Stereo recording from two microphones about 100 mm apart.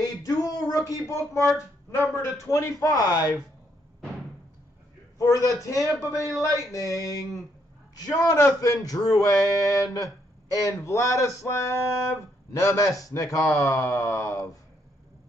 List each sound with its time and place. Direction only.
0.0 s a sound: 35° left (ahead or behind)
0.8 s speech: 30° left (ahead or behind)
5.2 s speech: 35° left (ahead or behind)